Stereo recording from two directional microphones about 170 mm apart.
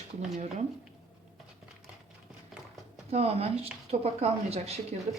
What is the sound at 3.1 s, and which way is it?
Speech, 35° right (ahead or behind).